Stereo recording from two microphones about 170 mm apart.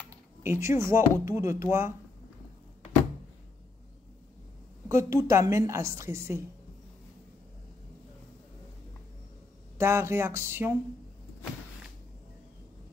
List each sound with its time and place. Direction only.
0.4 s a woman's voice: 15° right (ahead or behind)
4.8 s a woman's voice: 15° right (ahead or behind)
9.8 s a woman's voice: 15° right (ahead or behind)